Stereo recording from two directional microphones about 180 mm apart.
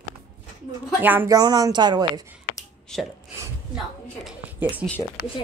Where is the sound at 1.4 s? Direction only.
20° right (ahead or behind).